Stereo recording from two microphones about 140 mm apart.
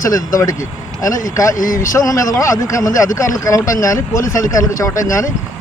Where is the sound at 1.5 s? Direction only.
70° left (ahead or behind).